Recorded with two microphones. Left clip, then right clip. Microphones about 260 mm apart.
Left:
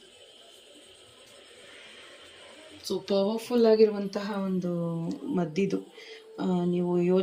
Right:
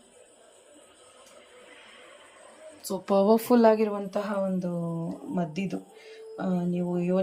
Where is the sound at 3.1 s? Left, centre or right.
Centre.